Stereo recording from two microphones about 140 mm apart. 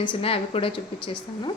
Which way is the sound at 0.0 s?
40° left (ahead or behind).